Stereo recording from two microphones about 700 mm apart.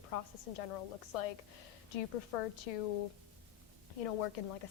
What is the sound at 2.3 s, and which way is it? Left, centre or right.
Speech, left.